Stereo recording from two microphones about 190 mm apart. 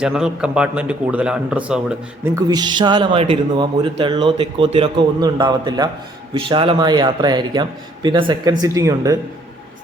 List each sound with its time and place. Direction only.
0.0 s a man's voice: 5° right (ahead or behind)
2.3 s a man's voice: 20° right (ahead or behind)